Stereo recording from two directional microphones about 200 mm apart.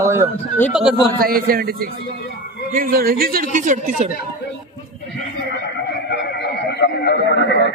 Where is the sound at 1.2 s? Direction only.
50° right (ahead or behind).